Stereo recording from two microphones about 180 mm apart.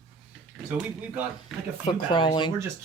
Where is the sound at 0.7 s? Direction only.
10° right (ahead or behind).